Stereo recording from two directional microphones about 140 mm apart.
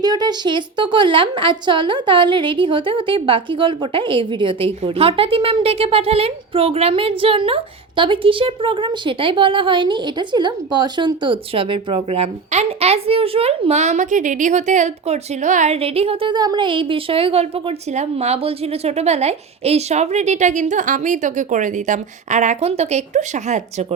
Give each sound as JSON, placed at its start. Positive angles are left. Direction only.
{"t": 0.0, "sound": "a woman's voice", "side_deg": -30}
{"t": 16.3, "sound": "a woman's voice", "side_deg": -30}